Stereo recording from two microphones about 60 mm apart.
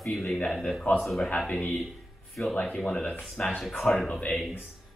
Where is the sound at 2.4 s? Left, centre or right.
Centre.